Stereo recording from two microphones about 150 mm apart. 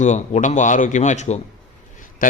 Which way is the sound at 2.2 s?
65° left (ahead or behind).